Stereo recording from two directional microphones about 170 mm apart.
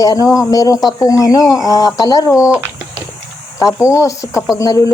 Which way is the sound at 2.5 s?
10° right (ahead or behind).